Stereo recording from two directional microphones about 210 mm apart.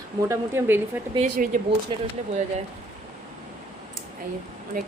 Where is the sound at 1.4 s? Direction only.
40° right (ahead or behind).